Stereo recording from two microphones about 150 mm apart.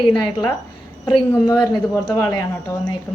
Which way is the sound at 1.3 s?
15° left (ahead or behind).